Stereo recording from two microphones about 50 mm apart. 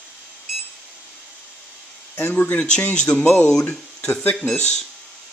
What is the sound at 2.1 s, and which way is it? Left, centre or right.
Speech, left.